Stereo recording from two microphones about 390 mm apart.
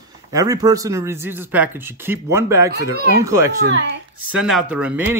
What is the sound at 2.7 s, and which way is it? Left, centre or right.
Speech, right.